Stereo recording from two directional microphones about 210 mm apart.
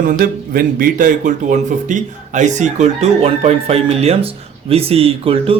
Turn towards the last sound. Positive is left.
turn(degrees=-25)  # may be behind; listen again after turning